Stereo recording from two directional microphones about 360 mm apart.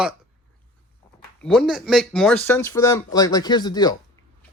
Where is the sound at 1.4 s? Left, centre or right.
Centre.